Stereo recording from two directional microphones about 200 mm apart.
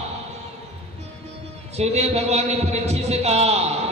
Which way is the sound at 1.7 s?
35° right (ahead or behind).